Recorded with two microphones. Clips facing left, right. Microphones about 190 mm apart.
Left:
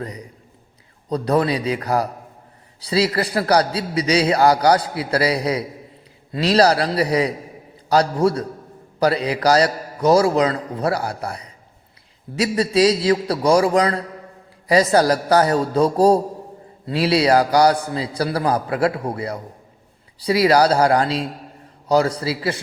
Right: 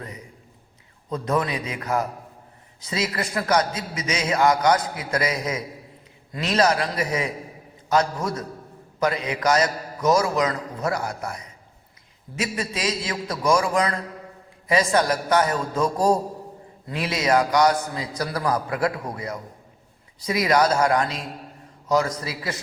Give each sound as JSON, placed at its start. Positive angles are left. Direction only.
{"t": 1.1, "sound": "a man's voice", "side_deg": 35}